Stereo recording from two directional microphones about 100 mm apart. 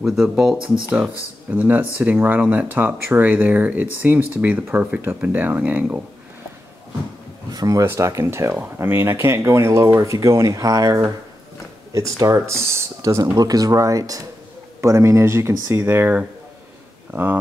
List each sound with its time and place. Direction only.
0.0 s speech: 5° right (ahead or behind)
1.5 s speech: 15° right (ahead or behind)
7.5 s speech: 35° right (ahead or behind); by 17.4 s 20° right (ahead or behind)